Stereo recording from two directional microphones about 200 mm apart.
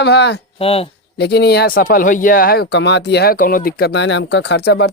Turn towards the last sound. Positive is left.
turn(degrees=55)  # may be behind; listen again after turning